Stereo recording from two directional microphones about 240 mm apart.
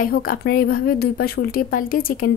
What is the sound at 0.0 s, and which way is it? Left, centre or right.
Speech, left.